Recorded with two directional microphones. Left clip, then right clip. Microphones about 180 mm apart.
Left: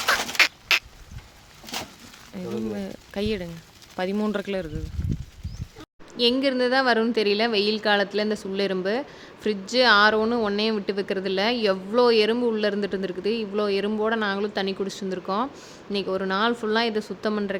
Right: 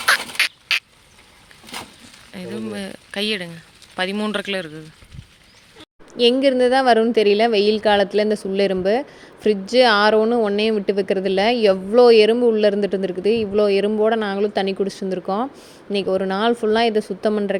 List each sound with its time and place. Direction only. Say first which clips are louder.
0.2 s turkey: even; 15° left (ahead or behind)
2.3 s speech: right 1 dB; centre (ahead or behind)
6.3 s a woman's voice: right 6 dB; 20° right (ahead or behind)